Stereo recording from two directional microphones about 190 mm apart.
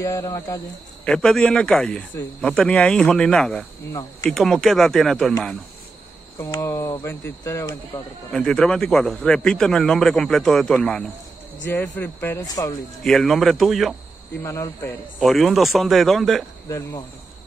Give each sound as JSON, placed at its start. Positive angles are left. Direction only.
{"t": 0.0, "sound": "speech", "side_deg": 15}
{"t": 1.0, "sound": "a man's voice", "side_deg": 5}
{"t": 6.3, "sound": "speech", "side_deg": 15}
{"t": 8.3, "sound": "a man's voice", "side_deg": 5}
{"t": 13.0, "sound": "a man's voice", "side_deg": 0}
{"t": 14.4, "sound": "speech", "side_deg": 15}
{"t": 15.2, "sound": "a man's voice", "side_deg": 0}
{"t": 16.6, "sound": "speech", "side_deg": 15}